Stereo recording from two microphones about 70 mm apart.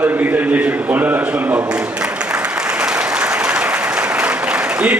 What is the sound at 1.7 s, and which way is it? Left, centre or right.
Applause, centre.